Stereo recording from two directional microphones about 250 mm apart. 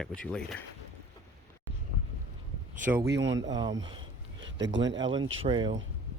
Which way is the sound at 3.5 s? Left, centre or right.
Centre.